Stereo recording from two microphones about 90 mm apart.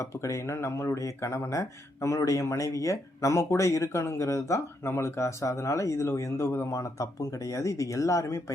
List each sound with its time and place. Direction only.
0.0 s speech: 35° left (ahead or behind)